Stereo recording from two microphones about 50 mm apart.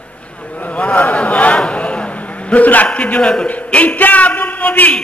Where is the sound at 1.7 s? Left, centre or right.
Left.